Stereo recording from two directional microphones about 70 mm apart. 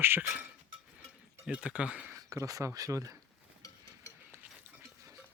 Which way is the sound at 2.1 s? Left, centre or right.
Right.